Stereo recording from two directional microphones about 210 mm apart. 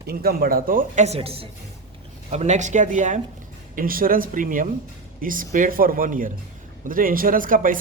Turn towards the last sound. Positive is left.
turn(degrees=-40)  # may be behind; listen again after turning